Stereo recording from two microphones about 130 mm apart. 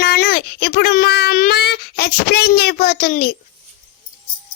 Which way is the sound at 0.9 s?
90° left.